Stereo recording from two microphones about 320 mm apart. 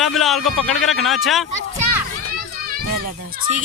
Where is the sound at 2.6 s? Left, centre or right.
Right.